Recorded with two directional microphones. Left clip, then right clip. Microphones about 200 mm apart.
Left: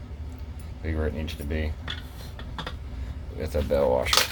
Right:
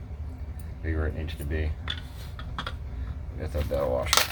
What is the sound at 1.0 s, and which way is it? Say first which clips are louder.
Speech: left 6 dB; 35° left (ahead or behind).